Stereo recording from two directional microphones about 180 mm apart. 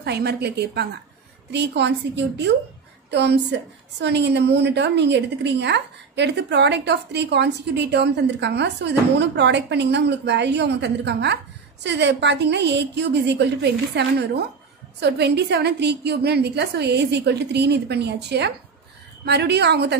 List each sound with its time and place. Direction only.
0.0 s a woman's voice: 65° right (ahead or behind)